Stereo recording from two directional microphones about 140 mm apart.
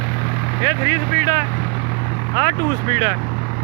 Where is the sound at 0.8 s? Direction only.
20° left (ahead or behind).